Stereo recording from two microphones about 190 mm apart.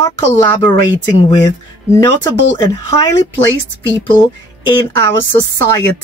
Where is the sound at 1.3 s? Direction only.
20° left (ahead or behind).